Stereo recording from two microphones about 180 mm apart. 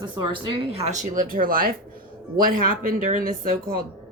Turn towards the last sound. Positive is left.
turn(degrees=-50)  # may be behind; listen again after turning